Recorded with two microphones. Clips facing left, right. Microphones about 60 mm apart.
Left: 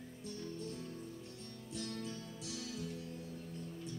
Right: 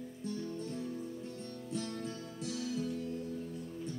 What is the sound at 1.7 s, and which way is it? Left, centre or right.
Music, right.